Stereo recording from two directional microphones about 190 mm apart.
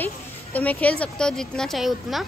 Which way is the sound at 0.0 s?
10° left (ahead or behind).